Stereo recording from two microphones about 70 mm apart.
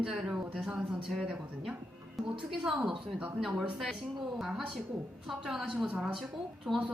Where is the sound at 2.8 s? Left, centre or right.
Centre.